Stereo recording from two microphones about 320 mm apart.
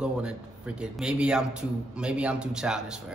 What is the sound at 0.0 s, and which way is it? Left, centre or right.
A man's voice, centre.